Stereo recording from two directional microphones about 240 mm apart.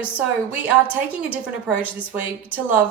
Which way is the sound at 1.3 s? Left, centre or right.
Centre.